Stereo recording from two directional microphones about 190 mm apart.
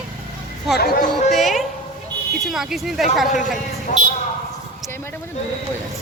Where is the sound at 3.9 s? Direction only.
45° left (ahead or behind).